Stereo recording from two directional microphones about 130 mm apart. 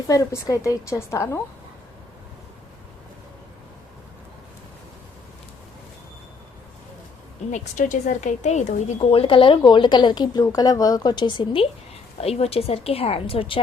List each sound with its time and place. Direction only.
0.1 s a woman's voice: 25° left (ahead or behind)
7.5 s a woman's voice: 70° left (ahead or behind); by 11.7 s 40° left (ahead or behind)
12.1 s a woman's voice: 50° left (ahead or behind)